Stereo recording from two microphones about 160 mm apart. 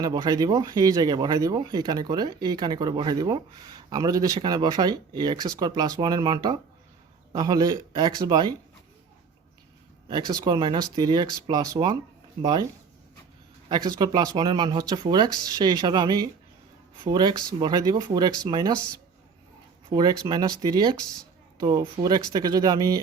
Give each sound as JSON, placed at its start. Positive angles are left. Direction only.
{"t": 0.0, "sound": "speech", "side_deg": -25}
{"t": 10.1, "sound": "speech", "side_deg": -25}
{"t": 13.7, "sound": "speech", "side_deg": -25}
{"t": 19.9, "sound": "speech", "side_deg": -25}